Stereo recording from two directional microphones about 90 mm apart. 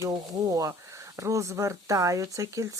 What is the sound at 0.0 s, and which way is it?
Speech, 45° right (ahead or behind).